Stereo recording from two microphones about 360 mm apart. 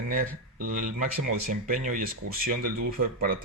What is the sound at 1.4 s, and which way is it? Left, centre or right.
Speech, right.